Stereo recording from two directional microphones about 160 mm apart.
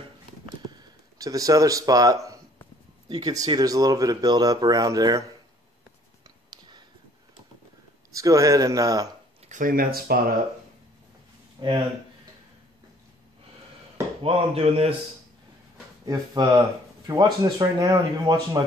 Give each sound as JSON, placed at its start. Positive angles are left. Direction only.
{"t": 0.6, "sound": "a sound", "side_deg": -25}
{"t": 3.1, "sound": "speech", "side_deg": -25}
{"t": 8.1, "sound": "speech", "side_deg": -20}
{"t": 9.5, "sound": "speech", "side_deg": -60}
{"t": 11.6, "sound": "speech", "side_deg": -30}
{"t": 14.2, "sound": "speech", "side_deg": -35}
{"t": 16.1, "sound": "speech", "side_deg": -25}